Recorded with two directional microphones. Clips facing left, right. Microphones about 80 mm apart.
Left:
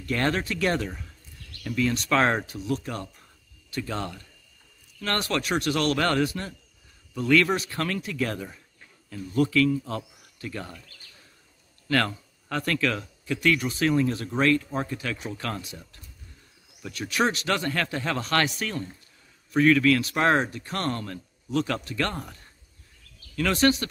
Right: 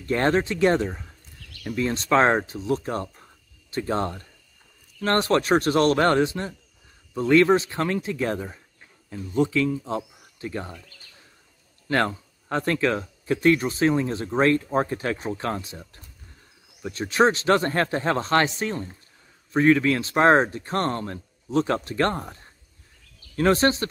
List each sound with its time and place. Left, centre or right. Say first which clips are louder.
0.0 s speech: right 5 dB; right
11.9 s speech: right 2 dB; right